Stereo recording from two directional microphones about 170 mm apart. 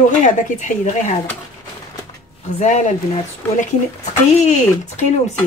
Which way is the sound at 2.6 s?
45° left (ahead or behind).